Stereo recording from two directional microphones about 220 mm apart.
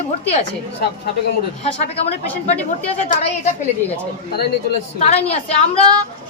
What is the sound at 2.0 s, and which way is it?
Speech, 30° left (ahead or behind).